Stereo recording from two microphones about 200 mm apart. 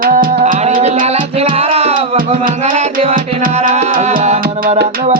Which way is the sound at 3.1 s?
45° right (ahead or behind).